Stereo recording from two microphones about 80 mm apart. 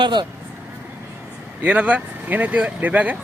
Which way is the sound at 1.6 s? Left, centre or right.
Centre.